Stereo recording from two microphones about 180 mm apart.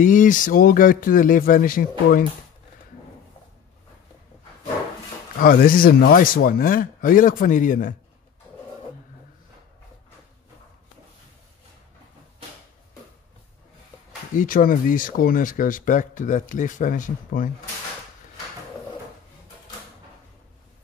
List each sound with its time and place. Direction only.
0.0 s speech: 45° left (ahead or behind)
5.4 s speech: 55° left (ahead or behind)
14.3 s speech: 50° left (ahead or behind)